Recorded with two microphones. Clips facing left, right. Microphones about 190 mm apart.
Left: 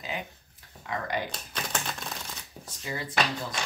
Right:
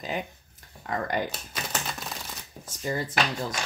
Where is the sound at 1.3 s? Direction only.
5° right (ahead or behind).